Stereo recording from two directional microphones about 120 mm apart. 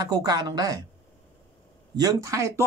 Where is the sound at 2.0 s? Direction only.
25° right (ahead or behind).